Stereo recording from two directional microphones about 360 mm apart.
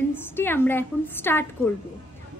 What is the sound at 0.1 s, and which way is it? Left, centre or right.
A woman's voice, centre.